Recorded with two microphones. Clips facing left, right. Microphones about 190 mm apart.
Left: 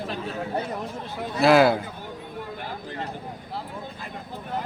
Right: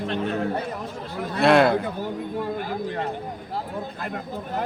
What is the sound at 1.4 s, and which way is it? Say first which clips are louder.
Speech: even; centre (ahead or behind).